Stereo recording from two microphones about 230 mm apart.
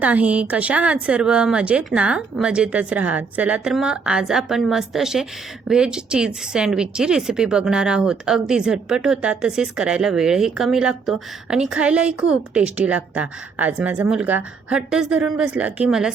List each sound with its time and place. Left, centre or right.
0.0 s speech: centre